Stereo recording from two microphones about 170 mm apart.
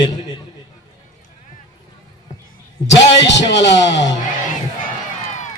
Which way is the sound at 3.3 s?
90° left.